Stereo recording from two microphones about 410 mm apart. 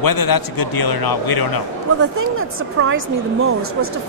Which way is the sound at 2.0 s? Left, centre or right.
Right.